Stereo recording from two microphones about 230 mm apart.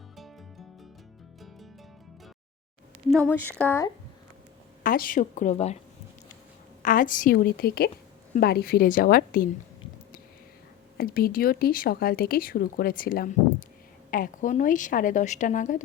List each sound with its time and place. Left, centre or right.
3.2 s speech: centre
4.8 s speech: left
6.8 s speech: left
10.9 s speech: left